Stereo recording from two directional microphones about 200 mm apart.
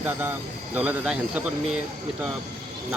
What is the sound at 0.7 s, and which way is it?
Speech, 5° right (ahead or behind).